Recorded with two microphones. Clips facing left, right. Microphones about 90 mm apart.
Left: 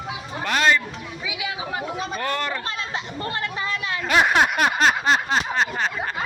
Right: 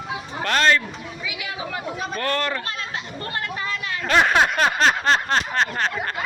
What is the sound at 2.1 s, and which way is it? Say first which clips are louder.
Speech: right 3 dB; 10° left (ahead or behind).